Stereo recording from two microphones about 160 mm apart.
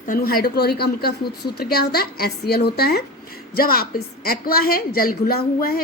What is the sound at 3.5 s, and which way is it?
A woman's voice, 70° left (ahead or behind).